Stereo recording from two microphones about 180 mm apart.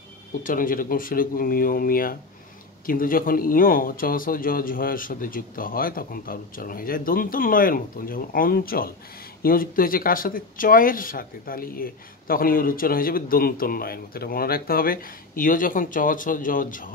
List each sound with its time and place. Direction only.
0.4 s speech: 50° left (ahead or behind)